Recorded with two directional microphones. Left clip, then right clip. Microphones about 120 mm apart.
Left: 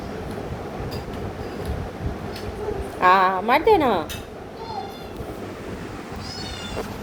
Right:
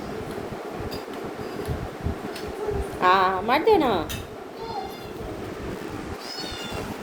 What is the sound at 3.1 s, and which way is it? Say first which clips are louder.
Speech: left 3 dB; 15° left (ahead or behind).